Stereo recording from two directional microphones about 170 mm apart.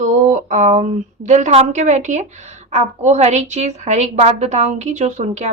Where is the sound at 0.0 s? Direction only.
45° right (ahead or behind).